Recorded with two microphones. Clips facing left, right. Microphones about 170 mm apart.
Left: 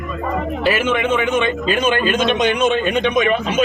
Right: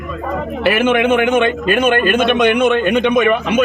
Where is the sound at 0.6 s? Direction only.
60° right (ahead or behind).